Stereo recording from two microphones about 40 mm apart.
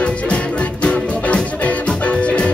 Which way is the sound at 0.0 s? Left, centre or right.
Left.